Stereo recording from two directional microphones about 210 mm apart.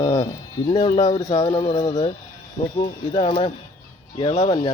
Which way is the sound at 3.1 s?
25° left (ahead or behind).